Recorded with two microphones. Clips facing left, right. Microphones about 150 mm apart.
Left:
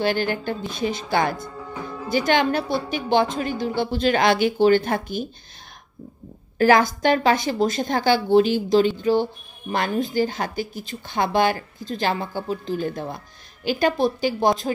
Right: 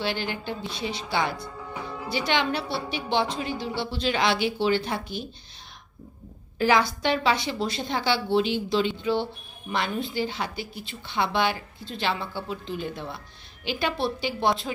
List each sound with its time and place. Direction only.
0.0 s a woman's voice: 50° left (ahead or behind)
1.5 s music: centre (ahead or behind)
2.0 s a woman's voice: 45° left (ahead or behind)
6.6 s a woman's voice: 45° left (ahead or behind)